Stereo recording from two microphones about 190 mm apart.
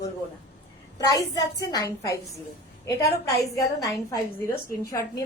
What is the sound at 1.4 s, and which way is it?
A woman's voice, 20° left (ahead or behind).